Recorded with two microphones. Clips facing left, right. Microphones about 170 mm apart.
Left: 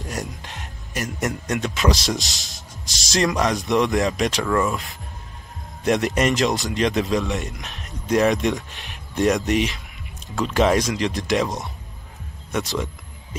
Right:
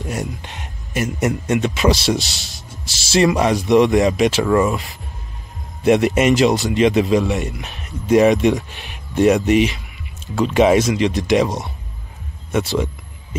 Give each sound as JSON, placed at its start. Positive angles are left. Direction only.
{"t": 0.0, "sound": "speech", "side_deg": 0}